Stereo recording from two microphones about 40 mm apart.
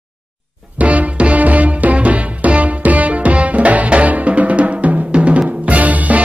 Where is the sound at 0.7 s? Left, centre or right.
Right.